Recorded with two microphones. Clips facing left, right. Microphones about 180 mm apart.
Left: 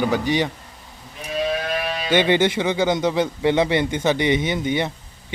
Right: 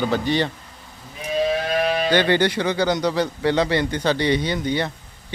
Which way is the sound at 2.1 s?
20° left (ahead or behind).